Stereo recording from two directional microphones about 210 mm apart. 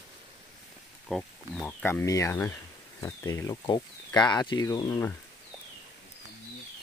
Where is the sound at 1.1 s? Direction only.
5° left (ahead or behind).